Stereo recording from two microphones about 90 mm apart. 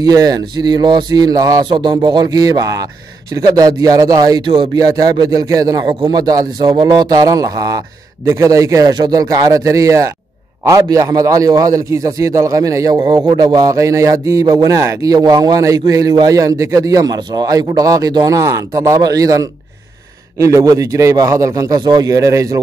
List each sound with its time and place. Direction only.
0.0 s a man's voice: 45° right (ahead or behind)
1.6 s a man's voice: 60° right (ahead or behind)
2.3 s a man's voice: 40° right (ahead or behind)
5.9 s a man's voice: 55° right (ahead or behind)
13.0 s a man's voice: 55° right (ahead or behind); by 22.6 s 40° right (ahead or behind)